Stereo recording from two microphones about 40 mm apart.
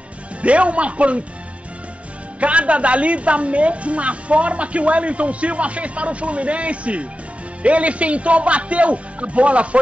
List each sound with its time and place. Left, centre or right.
0.4 s a woman's voice: right
2.4 s a woman's voice: right